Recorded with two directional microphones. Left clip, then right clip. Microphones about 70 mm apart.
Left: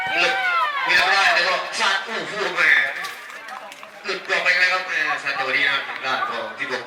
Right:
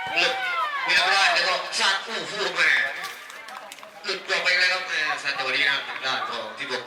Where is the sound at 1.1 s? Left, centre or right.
Right.